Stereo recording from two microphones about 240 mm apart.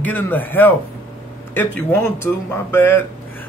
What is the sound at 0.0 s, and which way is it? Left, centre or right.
A man's voice, centre.